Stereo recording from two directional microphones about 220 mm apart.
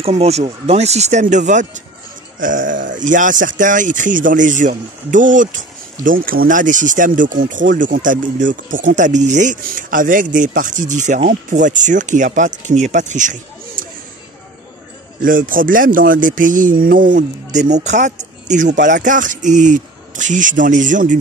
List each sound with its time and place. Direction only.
0.0 s speech: 30° right (ahead or behind)
15.2 s speech: 40° right (ahead or behind)